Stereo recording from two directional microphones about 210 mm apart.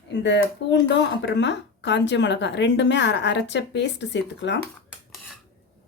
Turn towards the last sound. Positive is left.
turn(degrees=55)  # may be behind; listen again after turning